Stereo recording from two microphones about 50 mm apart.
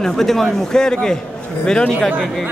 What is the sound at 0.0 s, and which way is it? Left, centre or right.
A man's voice, centre.